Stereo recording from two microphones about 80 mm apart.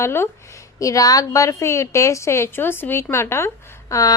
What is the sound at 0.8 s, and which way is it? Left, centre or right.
A woman's voice, left.